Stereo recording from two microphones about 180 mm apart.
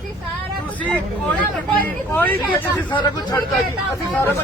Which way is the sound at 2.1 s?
10° left (ahead or behind).